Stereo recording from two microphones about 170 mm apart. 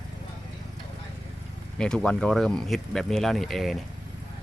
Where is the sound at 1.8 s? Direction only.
5° left (ahead or behind).